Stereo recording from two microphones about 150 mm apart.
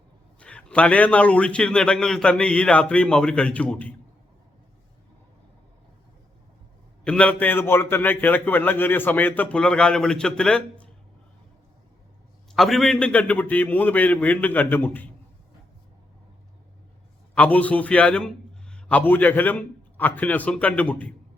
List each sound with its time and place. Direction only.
0.3 s a man's voice: 5° left (ahead or behind)
7.0 s a man's voice: 5° left (ahead or behind)
12.5 s a man's voice: centre (ahead or behind)
17.3 s a man's voice: 10° left (ahead or behind)